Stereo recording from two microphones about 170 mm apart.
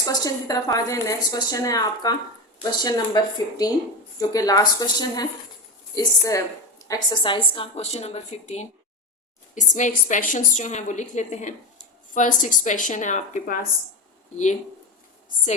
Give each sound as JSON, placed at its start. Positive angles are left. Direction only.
{"t": 0.0, "sound": "a woman's voice", "side_deg": 20}